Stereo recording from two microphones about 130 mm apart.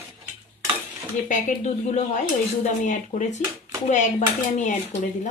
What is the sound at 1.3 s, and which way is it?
Speech, 75° left (ahead or behind).